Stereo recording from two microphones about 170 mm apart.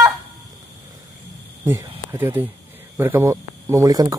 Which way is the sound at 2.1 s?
15° right (ahead or behind).